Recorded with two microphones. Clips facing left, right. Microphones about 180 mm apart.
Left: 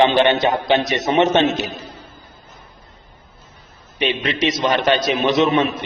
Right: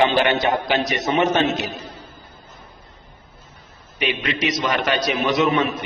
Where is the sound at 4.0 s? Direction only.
30° left (ahead or behind).